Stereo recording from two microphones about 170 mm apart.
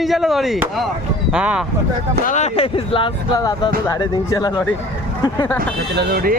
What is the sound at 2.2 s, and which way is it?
Speech, 45° left (ahead or behind).